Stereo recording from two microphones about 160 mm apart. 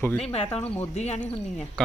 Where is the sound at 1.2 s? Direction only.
5° left (ahead or behind).